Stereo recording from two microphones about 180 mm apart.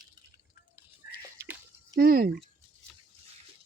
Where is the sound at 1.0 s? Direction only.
60° left (ahead or behind).